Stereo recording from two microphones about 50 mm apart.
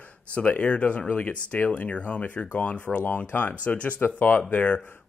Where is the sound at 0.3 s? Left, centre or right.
Left.